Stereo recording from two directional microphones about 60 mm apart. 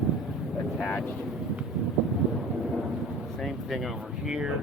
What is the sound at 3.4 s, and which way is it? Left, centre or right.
Speech, centre.